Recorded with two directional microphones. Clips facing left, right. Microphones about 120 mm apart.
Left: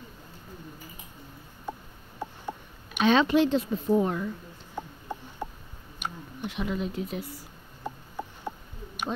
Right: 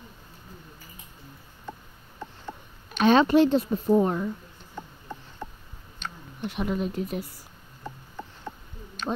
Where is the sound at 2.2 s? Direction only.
10° left (ahead or behind).